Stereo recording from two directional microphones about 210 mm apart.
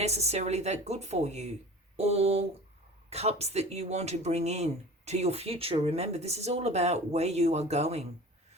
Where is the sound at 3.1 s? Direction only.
30° right (ahead or behind).